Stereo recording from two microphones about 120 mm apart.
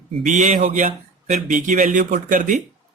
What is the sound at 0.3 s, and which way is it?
Speech, 75° right (ahead or behind).